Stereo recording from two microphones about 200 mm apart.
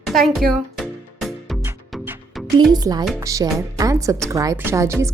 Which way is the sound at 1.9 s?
Centre (ahead or behind).